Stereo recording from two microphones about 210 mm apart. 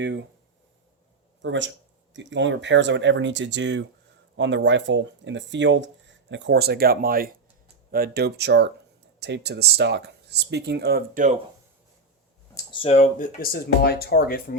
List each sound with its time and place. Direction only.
0.0 s speech: 60° right (ahead or behind)
1.4 s speech: 60° right (ahead or behind); by 11.3 s 40° right (ahead or behind)
12.5 s speech: 25° left (ahead or behind); by 14.4 s 45° left (ahead or behind)